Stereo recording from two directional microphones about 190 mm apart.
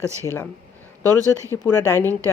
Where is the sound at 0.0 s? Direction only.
15° right (ahead or behind).